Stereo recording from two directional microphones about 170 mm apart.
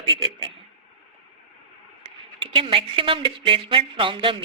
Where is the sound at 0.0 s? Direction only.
30° right (ahead or behind).